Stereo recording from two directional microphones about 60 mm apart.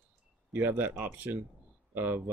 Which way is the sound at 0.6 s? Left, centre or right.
Right.